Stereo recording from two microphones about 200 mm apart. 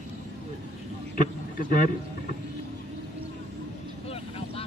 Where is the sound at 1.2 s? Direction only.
40° left (ahead or behind).